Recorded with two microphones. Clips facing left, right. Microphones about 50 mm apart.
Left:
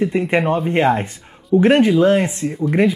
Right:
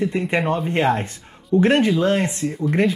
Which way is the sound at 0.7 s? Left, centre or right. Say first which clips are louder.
Left 3 dB; left.